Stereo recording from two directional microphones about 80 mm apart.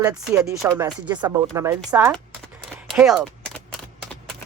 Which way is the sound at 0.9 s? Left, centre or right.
Right.